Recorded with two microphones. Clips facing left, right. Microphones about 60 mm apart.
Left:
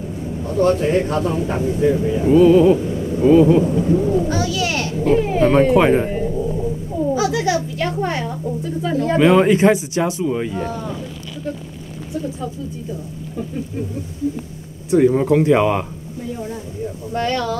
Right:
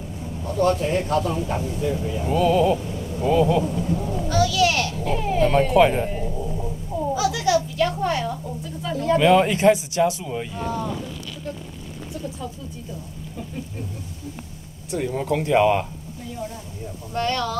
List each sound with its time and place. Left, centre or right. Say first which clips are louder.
0.6 s speech: left 5 dB; left
7.2 s a sound: even; left
8.8 s speech: left 3 dB; left
14.9 s speech: left 10 dB; left
17.1 s speech: left 3 dB; left